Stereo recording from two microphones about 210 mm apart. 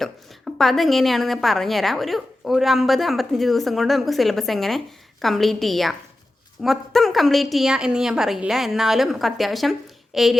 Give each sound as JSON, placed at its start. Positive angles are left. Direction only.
{"t": 0.0, "sound": "a woman's voice", "side_deg": 0}